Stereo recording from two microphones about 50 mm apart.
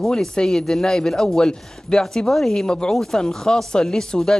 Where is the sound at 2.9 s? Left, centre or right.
Centre.